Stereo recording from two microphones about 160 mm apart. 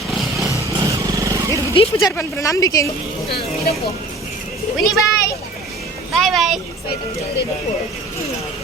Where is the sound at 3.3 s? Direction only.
75° left (ahead or behind).